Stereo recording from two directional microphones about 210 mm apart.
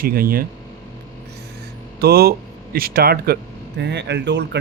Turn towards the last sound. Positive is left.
turn(degrees=-55)  # may be behind; listen again after turning